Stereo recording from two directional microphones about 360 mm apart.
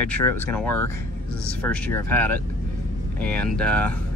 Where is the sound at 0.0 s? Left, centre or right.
Centre.